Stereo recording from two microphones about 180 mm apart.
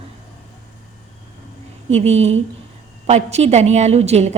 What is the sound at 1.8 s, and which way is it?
A woman's voice, 35° right (ahead or behind).